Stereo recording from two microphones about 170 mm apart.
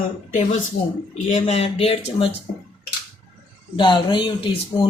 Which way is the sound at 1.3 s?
40° left (ahead or behind).